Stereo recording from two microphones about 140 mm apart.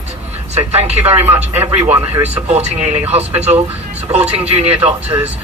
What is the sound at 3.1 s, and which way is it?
Speech, 50° right (ahead or behind).